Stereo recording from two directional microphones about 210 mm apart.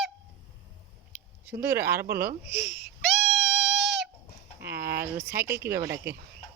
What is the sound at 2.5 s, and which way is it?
Speech, 55° right (ahead or behind).